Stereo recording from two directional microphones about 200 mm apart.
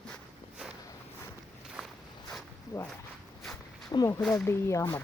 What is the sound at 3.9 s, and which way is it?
Speech, 20° left (ahead or behind).